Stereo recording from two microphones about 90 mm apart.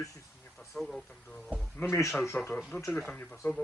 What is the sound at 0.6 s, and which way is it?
Speech, 5° left (ahead or behind).